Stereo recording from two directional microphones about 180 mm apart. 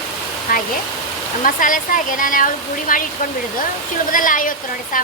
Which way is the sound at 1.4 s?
50° left (ahead or behind).